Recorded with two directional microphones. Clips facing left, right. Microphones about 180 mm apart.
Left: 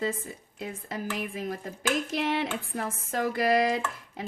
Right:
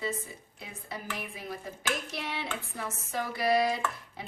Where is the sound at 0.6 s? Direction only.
45° left (ahead or behind).